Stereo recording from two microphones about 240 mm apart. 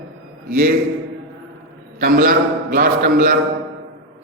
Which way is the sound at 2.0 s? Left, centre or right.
Right.